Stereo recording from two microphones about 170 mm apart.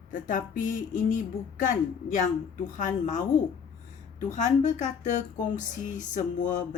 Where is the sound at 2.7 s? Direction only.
45° left (ahead or behind).